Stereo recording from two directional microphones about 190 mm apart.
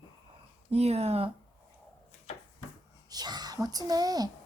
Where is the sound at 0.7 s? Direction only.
35° right (ahead or behind).